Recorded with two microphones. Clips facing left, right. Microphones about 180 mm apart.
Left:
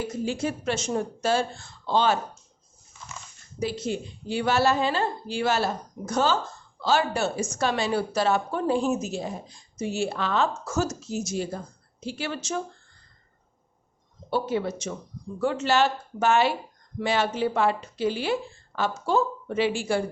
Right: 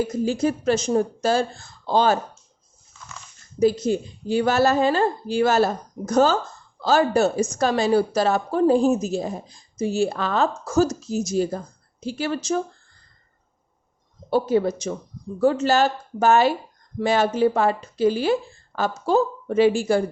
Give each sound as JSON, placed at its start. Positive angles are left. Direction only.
{"t": 0.3, "sound": "a woman's voice", "side_deg": -40}
{"t": 3.6, "sound": "a woman's voice", "side_deg": -40}
{"t": 14.3, "sound": "a woman's voice", "side_deg": -40}